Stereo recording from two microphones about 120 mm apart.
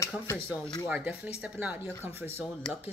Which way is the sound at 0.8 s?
15° right (ahead or behind).